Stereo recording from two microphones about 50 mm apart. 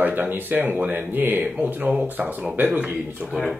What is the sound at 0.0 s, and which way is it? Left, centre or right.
Speech, right.